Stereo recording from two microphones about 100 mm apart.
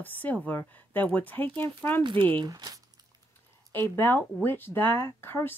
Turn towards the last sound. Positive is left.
turn(degrees=25)  # may be behind; listen again after turning